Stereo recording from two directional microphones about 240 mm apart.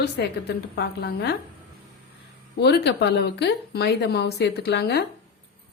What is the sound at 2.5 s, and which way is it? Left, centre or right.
A woman's voice, left.